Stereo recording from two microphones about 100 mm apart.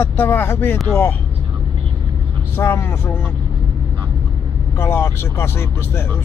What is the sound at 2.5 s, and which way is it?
Speech, 25° left (ahead or behind).